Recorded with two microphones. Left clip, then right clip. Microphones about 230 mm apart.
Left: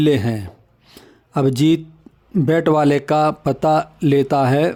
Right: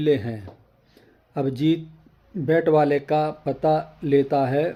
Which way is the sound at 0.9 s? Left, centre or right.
Left.